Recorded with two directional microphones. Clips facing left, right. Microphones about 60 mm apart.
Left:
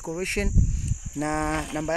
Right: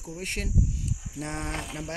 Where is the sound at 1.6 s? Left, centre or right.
Centre.